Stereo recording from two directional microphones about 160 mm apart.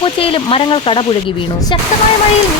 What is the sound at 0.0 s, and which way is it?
Speech, 35° left (ahead or behind).